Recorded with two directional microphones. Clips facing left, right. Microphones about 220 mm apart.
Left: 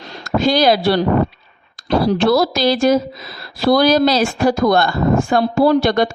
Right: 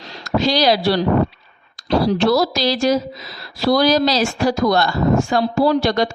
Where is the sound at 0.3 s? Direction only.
50° left (ahead or behind).